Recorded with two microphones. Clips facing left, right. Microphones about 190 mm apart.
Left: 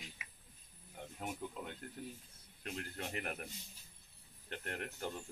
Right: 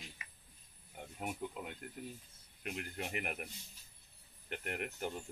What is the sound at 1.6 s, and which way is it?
Speech, 10° right (ahead or behind).